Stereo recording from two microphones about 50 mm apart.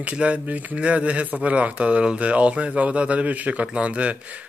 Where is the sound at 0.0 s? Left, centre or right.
Right.